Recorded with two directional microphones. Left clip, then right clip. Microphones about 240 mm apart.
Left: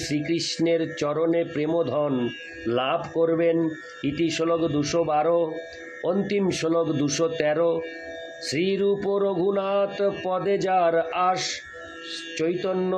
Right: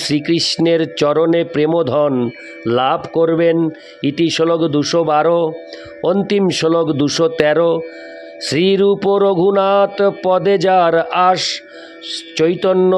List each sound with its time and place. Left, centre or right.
0.0 s music: right
12.1 s speech: right